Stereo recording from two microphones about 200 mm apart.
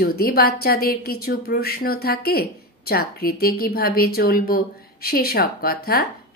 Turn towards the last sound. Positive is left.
turn(degrees=50)  # may be behind; listen again after turning